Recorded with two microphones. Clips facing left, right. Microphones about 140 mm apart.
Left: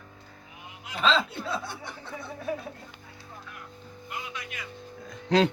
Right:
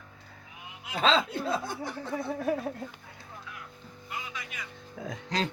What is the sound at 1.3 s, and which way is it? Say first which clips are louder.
Speech: right 3 dB; 45° right (ahead or behind).